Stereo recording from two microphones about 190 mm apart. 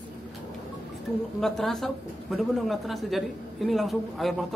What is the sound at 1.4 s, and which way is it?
Speech, centre (ahead or behind).